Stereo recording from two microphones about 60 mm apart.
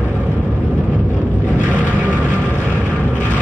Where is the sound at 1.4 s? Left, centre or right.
Right.